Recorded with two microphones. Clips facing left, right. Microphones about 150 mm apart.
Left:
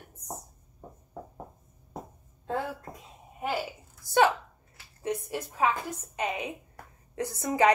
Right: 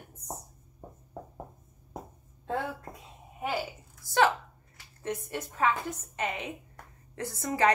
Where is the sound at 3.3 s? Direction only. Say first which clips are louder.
Left 1 dB; centre (ahead or behind).